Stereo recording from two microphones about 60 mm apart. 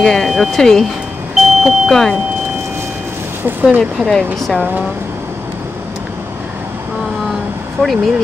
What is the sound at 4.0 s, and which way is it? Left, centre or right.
Speech, centre.